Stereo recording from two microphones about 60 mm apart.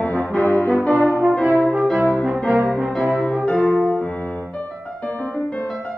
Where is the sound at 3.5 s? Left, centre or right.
Left.